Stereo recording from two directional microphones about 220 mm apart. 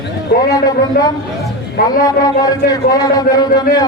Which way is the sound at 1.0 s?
45° left (ahead or behind).